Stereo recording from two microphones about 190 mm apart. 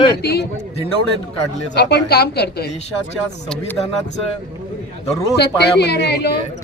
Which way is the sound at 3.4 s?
5° left (ahead or behind).